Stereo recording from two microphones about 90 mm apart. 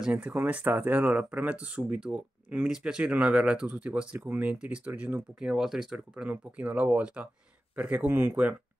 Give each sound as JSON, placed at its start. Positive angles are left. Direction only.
{"t": 0.0, "sound": "speech", "side_deg": -10}